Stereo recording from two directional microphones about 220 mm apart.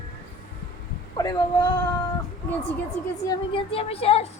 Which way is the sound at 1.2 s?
20° left (ahead or behind).